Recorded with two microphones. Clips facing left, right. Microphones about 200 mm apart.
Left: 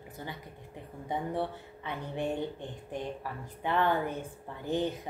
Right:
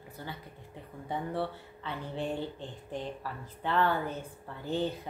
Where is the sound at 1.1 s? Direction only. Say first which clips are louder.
Left 1 dB; 15° left (ahead or behind).